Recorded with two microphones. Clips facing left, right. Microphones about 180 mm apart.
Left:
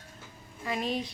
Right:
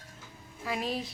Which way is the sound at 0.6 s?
Centre (ahead or behind).